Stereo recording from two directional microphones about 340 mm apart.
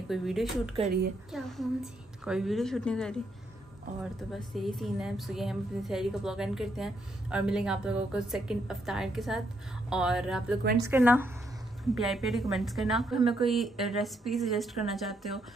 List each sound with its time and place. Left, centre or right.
0.1 s a woman's voice: centre
0.7 s a woman's voice: centre
1.3 s a woman's voice: centre
4.3 s a woman's voice: centre